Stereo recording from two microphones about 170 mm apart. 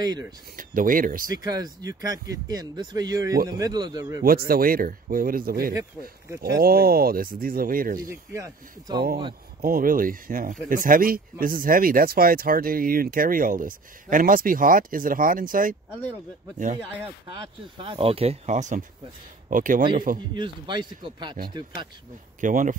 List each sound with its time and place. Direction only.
0.0 s speech: 25° right (ahead or behind)
0.6 s speech: 55° right (ahead or behind)
1.3 s speech: 20° right (ahead or behind)
4.2 s speech: 60° right (ahead or behind)
8.1 s speech: 15° right (ahead or behind)
9.6 s speech: 55° right (ahead or behind)
17.7 s speech: 30° right (ahead or behind); by 19.8 s 50° right (ahead or behind)
20.3 s speech: 25° right (ahead or behind)
22.4 s speech: 50° right (ahead or behind)